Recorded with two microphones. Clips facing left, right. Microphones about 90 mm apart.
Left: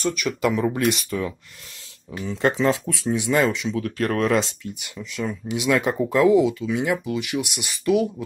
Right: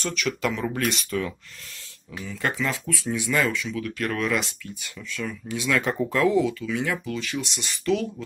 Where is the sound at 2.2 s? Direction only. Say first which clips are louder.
Left 7 dB; 25° left (ahead or behind).